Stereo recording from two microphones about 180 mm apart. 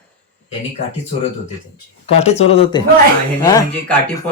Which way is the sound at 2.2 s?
35° left (ahead or behind).